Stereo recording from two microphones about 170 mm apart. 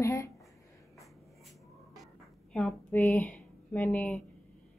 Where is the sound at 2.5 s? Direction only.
5° left (ahead or behind).